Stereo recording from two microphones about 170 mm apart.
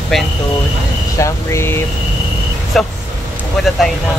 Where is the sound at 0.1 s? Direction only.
Centre (ahead or behind).